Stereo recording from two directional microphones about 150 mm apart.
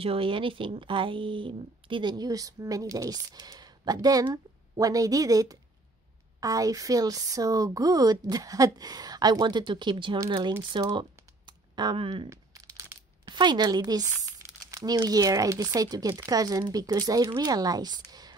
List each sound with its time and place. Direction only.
0.0 s speech: 40° right (ahead or behind)
12.3 s crumpling: 20° right (ahead or behind)
15.0 s speech: 25° right (ahead or behind)